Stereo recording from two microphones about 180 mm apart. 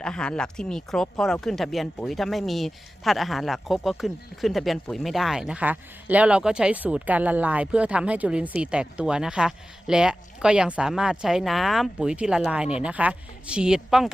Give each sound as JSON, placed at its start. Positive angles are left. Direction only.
{"t": 0.0, "sound": "speech", "side_deg": 5}